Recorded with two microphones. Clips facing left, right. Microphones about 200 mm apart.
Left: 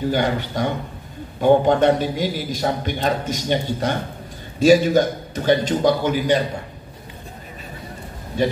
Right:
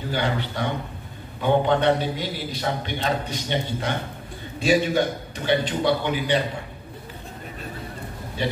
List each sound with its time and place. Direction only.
0.1 s a man's voice: 45° left (ahead or behind)